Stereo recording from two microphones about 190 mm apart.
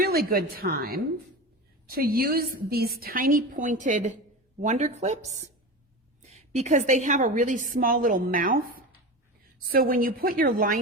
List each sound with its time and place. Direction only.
0.0 s a woman's voice: 50° right (ahead or behind)
6.5 s a woman's voice: 40° right (ahead or behind)